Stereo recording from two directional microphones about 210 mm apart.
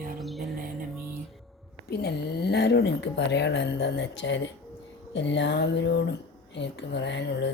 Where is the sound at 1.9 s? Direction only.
50° left (ahead or behind).